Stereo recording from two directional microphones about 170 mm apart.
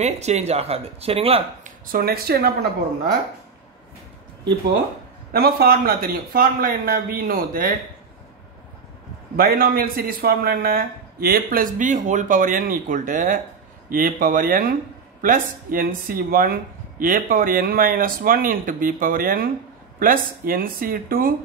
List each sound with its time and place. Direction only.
0.0 s speech: 40° right (ahead or behind)
1.9 s a man's voice: 65° right (ahead or behind)
5.3 s a man's voice: 65° right (ahead or behind)
9.4 s a man's voice: 60° right (ahead or behind)